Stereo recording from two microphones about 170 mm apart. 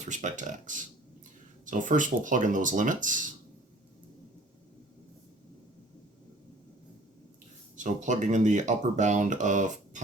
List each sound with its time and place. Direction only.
0.0 s speech: 45° right (ahead or behind)
7.8 s speech: 45° right (ahead or behind)